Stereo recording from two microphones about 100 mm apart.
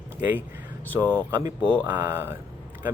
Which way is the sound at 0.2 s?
20° right (ahead or behind).